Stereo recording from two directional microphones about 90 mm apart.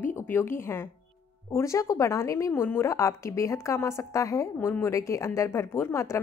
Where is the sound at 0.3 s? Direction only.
30° left (ahead or behind).